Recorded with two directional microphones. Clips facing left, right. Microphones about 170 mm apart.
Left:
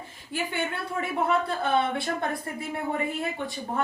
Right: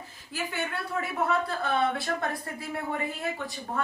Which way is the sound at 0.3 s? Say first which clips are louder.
Left 3 dB; 25° left (ahead or behind).